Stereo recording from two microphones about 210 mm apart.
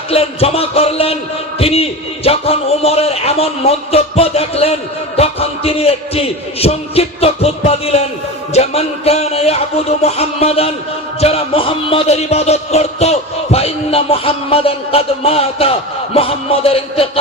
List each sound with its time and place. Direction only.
0.1 s a man's voice: 30° left (ahead or behind)